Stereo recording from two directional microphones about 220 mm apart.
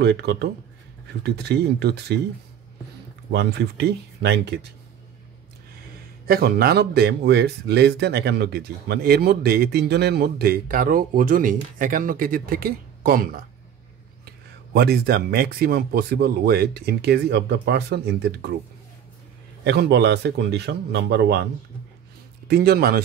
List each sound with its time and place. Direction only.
0.0 s speech: 50° right (ahead or behind)
3.3 s speech: 50° right (ahead or behind)
6.2 s speech: 45° right (ahead or behind)
19.6 s speech: 50° right (ahead or behind)
22.5 s speech: 45° right (ahead or behind)